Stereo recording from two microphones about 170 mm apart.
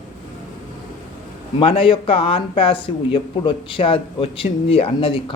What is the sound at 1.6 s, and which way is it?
Speech, 30° left (ahead or behind).